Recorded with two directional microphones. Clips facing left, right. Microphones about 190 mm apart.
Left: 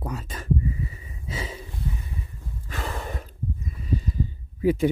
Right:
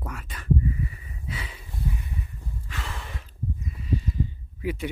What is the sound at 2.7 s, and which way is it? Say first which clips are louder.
Gasp: left 7 dB; 40° left (ahead or behind).